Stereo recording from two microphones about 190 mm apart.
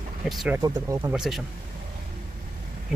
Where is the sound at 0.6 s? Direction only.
20° right (ahead or behind).